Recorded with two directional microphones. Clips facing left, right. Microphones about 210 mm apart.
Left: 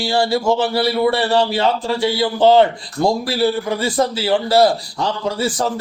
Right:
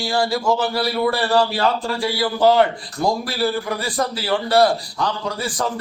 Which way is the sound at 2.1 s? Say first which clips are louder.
Left 3 dB; 25° left (ahead or behind).